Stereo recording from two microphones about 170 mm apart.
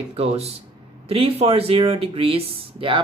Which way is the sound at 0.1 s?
35° right (ahead or behind).